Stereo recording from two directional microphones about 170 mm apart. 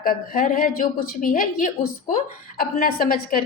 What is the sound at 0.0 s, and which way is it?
Speech, 55° left (ahead or behind).